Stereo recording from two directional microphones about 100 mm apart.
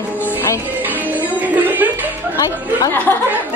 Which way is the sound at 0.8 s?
15° right (ahead or behind).